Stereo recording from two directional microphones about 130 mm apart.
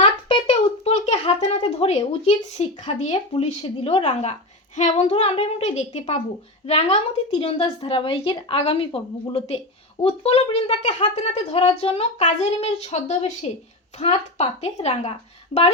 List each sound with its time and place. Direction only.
0.0 s a child's voice: 45° left (ahead or behind)
7.3 s a woman's voice: 45° left (ahead or behind)